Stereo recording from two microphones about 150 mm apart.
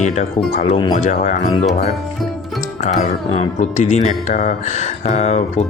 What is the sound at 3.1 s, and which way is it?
Speech, 50° left (ahead or behind).